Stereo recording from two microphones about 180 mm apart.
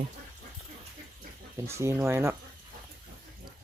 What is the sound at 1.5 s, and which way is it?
Speech, 15° right (ahead or behind).